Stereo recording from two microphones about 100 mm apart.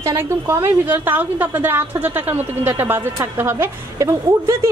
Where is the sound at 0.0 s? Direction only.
30° right (ahead or behind).